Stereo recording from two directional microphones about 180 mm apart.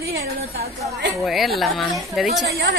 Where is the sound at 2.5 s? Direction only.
65° right (ahead or behind).